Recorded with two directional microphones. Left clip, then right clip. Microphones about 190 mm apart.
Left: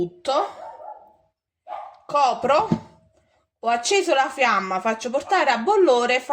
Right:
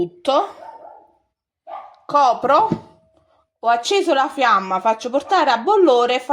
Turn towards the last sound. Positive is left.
turn(degrees=-20)  # may be behind; listen again after turning